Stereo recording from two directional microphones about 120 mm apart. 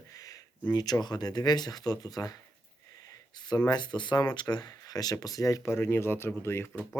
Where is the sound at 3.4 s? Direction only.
30° left (ahead or behind).